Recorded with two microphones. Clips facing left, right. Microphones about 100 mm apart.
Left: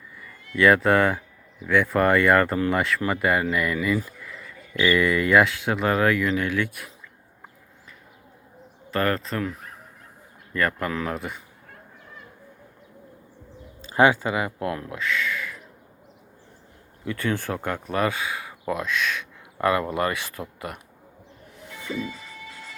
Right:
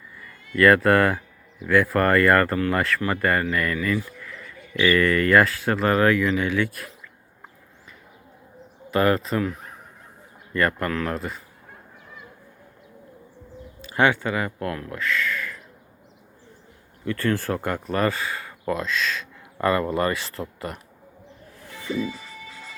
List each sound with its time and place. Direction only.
0.2 s speech: centre (ahead or behind)
4.2 s a sound: 10° left (ahead or behind)
4.8 s speech: 5° left (ahead or behind)
8.9 s speech: 10° right (ahead or behind)
13.8 s speech: 20° left (ahead or behind)
17.1 s speech: 10° left (ahead or behind)